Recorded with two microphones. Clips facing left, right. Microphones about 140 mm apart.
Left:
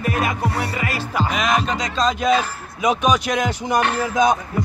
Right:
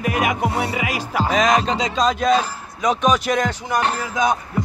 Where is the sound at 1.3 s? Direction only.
35° right (ahead or behind).